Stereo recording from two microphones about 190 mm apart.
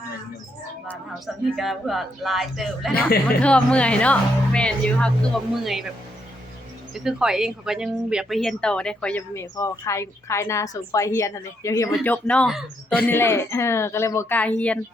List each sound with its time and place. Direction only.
1.5 s speech: centre (ahead or behind)
6.9 s speech: 5° right (ahead or behind)
13.1 s speech: 15° left (ahead or behind)